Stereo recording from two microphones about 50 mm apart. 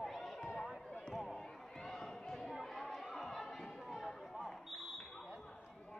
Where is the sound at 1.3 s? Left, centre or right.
Centre.